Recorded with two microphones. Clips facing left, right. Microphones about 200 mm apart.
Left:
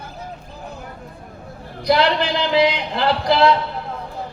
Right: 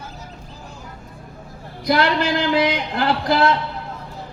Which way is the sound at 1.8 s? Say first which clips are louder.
Left 1 dB; 50° right (ahead or behind).